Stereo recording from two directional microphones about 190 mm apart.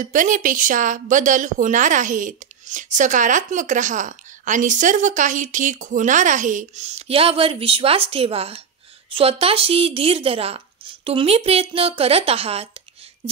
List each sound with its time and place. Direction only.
0.0 s speech: 45° right (ahead or behind)